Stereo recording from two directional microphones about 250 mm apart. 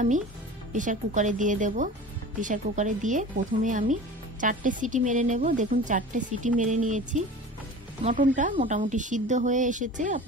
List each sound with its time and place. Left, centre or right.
0.7 s speech: right